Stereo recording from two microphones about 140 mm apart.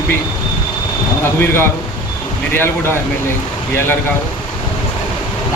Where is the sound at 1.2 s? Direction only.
15° left (ahead or behind).